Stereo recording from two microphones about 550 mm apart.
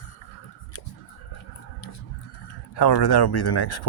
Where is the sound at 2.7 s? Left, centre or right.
Left.